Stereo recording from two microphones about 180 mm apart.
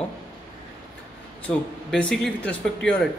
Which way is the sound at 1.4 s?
5° left (ahead or behind).